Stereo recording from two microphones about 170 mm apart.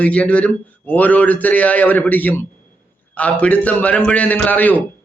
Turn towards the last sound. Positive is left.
turn(degrees=10)  # may be behind; listen again after turning